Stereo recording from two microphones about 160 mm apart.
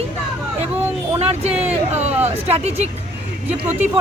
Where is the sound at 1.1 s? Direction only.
40° right (ahead or behind).